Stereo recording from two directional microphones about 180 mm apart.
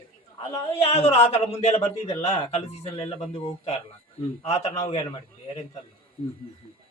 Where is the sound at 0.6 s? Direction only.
35° left (ahead or behind).